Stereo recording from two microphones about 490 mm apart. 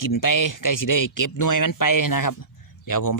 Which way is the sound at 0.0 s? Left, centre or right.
Left.